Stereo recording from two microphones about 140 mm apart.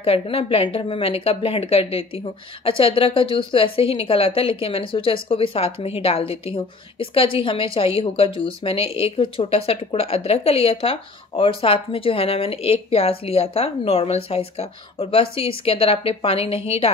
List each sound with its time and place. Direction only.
0.0 s a woman's voice: 40° left (ahead or behind)